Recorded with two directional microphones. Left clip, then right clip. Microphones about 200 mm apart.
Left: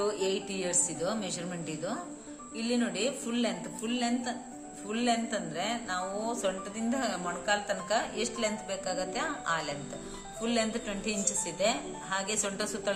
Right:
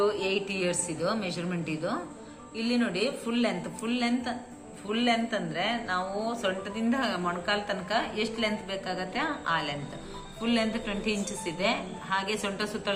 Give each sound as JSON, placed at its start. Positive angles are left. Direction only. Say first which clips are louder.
{"t": 0.0, "sound": "a woman's voice", "louder": "right 4 dB", "side_deg": 15}